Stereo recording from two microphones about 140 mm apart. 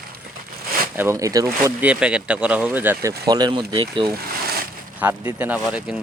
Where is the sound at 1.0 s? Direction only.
20° right (ahead or behind).